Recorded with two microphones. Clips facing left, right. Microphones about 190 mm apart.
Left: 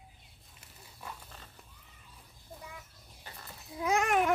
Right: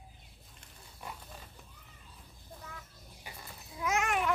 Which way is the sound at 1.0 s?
10° right (ahead or behind).